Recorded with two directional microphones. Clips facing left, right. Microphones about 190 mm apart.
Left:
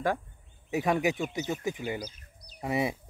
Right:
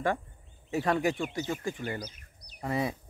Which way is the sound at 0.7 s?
15° left (ahead or behind).